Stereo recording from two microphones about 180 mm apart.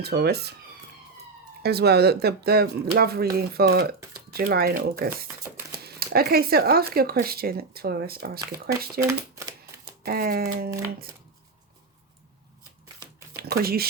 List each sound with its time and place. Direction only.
0.0 s speech: 65° right (ahead or behind)
1.6 s speech: 65° right (ahead or behind)
9.0 s a sound: 15° right (ahead or behind)
10.0 s speech: 55° right (ahead or behind)
13.3 s speech: 55° right (ahead or behind)